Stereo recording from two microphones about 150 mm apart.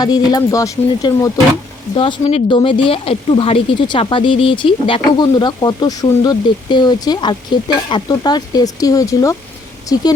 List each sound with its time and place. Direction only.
0.0 s speech: 25° left (ahead or behind)
2.5 s speech: 35° left (ahead or behind)